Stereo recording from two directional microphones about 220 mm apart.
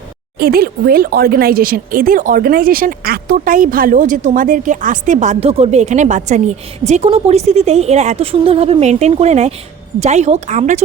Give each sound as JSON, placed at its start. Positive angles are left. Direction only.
{"t": 0.3, "sound": "speech", "side_deg": -45}